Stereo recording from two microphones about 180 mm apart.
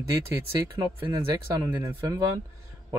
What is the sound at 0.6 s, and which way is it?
Speech, 20° right (ahead or behind).